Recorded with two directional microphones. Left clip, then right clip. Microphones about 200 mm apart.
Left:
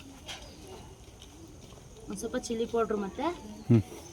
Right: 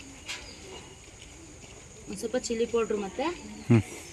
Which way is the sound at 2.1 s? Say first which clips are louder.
Right 4 dB; 15° left (ahead or behind).